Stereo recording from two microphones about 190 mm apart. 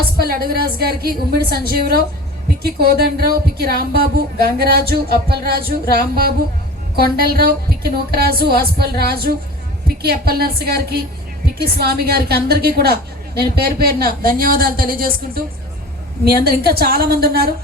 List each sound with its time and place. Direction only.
0.2 s a woman's voice: 55° right (ahead or behind)
6.9 s a woman's voice: 55° right (ahead or behind)